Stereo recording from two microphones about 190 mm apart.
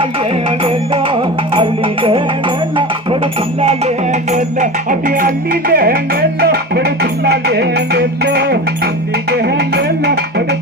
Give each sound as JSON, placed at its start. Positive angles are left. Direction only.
{"t": 0.6, "sound": "music", "side_deg": -30}
{"t": 3.6, "sound": "music", "side_deg": -35}